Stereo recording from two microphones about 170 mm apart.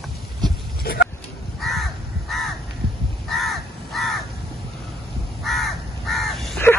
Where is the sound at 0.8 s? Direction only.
60° left (ahead or behind).